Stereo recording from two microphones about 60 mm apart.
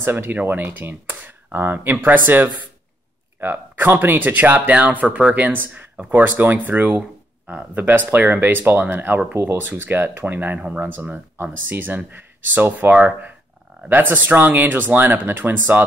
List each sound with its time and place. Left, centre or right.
0.0 s speech: right